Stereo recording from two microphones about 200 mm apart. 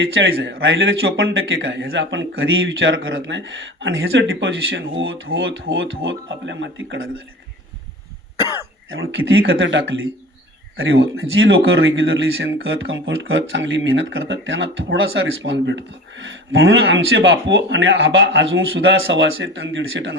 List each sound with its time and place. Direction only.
0.0 s a man's voice: 70° right (ahead or behind)
8.9 s a man's voice: 80° right
9.5 s a man's voice: 65° right (ahead or behind)
11.2 s a man's voice: 75° right (ahead or behind)